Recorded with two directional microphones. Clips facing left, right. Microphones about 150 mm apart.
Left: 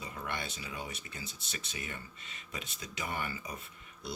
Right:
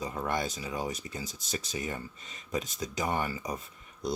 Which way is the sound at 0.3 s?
35° right (ahead or behind).